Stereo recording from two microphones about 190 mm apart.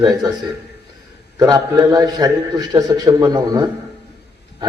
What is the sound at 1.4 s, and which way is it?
A man's voice, 20° right (ahead or behind).